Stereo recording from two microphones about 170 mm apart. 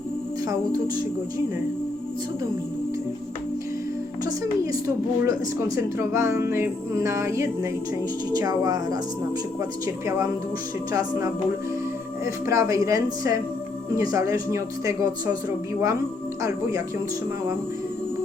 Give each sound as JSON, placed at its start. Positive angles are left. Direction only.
{"t": 5.2, "sound": "a woman's voice", "side_deg": -20}